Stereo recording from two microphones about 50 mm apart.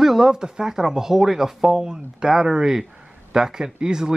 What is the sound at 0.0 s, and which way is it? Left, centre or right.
Speech, centre.